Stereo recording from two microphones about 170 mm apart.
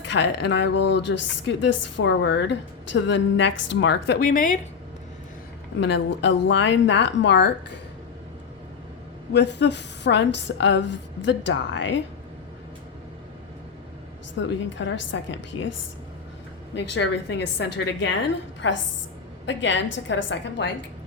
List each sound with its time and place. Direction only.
0.0 s a woman's voice: 90° left
4.2 s a woman's voice: 50° left (ahead or behind)
5.8 s a woman's voice: 90° left
9.3 s a woman's voice: 90° left
14.3 s a woman's voice: 90° left
16.7 s a woman's voice: 90° left